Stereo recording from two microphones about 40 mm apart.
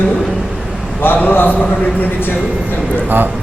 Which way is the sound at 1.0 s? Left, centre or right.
Left.